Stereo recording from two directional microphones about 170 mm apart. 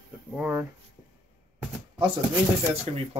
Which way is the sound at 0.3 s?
10° right (ahead or behind).